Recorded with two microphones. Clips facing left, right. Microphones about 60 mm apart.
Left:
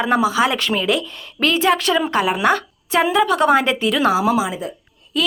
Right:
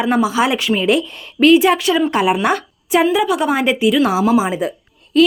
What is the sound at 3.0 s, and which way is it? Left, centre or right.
Speech, centre.